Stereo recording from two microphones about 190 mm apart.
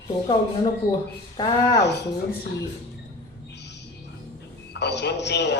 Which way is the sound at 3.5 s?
65° left (ahead or behind).